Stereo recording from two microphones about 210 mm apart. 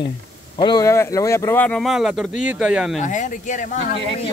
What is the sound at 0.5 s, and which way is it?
Speech, 20° left (ahead or behind).